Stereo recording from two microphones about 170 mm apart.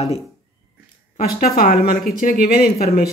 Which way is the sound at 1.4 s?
55° left (ahead or behind).